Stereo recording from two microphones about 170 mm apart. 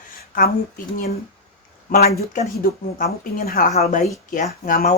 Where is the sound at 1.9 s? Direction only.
60° left (ahead or behind).